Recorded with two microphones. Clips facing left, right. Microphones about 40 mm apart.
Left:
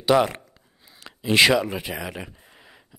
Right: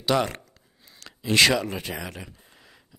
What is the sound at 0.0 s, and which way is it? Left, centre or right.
Speech, centre.